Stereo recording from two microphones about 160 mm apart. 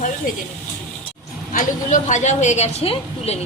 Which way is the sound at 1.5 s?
55° left (ahead or behind).